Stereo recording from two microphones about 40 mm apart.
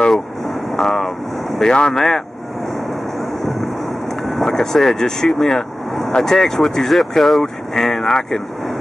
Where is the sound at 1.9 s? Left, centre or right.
Centre.